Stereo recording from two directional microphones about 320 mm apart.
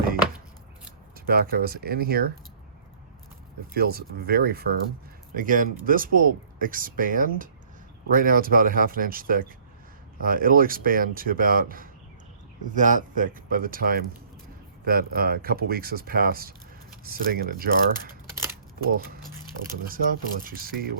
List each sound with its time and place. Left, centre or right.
1.1 s speech: right
3.8 s speech: right
19.9 s speech: right